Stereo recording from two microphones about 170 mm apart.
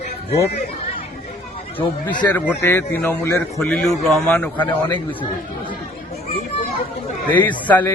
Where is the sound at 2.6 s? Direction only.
15° left (ahead or behind).